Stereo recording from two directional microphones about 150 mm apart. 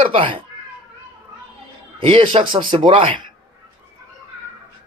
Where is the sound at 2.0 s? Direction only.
35° right (ahead or behind).